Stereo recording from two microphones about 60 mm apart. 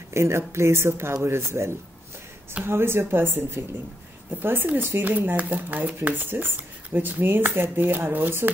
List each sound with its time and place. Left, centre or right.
0.1 s a woman's voice: right